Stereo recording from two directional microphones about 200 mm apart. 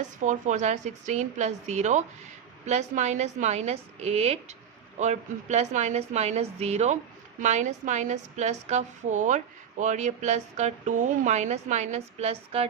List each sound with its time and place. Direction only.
0.0 s a woman's voice: 40° right (ahead or behind)